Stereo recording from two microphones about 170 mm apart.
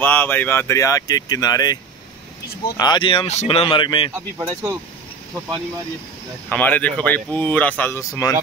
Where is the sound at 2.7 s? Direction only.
25° left (ahead or behind).